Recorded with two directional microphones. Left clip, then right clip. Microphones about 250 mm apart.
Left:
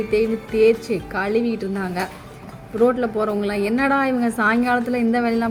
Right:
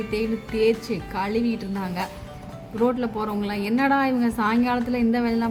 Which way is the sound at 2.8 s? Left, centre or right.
Centre.